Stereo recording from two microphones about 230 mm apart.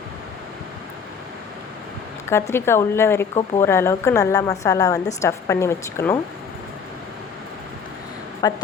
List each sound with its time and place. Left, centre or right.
2.3 s a woman's voice: centre
8.4 s a woman's voice: centre